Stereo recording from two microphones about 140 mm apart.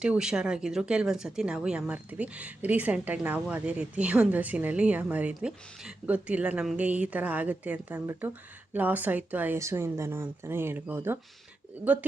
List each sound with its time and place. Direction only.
0.0 s speech: 5° right (ahead or behind)